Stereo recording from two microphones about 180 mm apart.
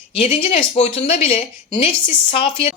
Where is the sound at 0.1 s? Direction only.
30° left (ahead or behind).